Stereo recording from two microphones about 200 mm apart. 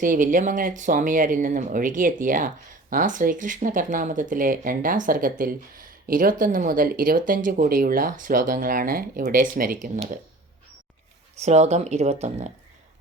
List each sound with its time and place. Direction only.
0.0 s speech: 40° right (ahead or behind)
11.4 s speech: 35° right (ahead or behind)